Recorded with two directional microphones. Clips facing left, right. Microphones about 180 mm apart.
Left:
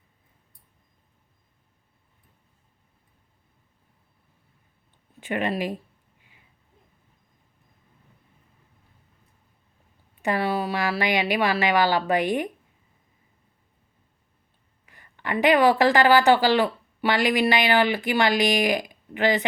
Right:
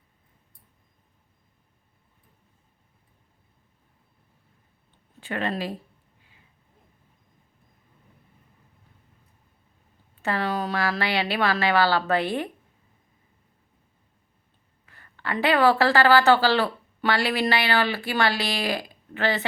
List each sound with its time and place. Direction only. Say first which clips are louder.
5.2 s speech: left 2 dB; 15° left (ahead or behind)
10.2 s speech: left 2 dB; 10° left (ahead or behind)
14.8 s speech: left 1 dB; 15° left (ahead or behind)